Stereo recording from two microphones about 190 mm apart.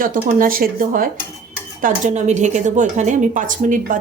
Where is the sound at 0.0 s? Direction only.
45° right (ahead or behind).